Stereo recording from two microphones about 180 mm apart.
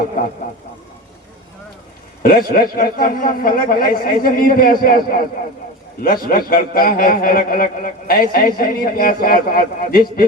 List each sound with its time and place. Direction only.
2.2 s a man's voice: 55° left (ahead or behind)